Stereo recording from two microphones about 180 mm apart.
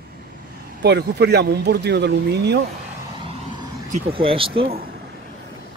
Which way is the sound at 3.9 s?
30° right (ahead or behind).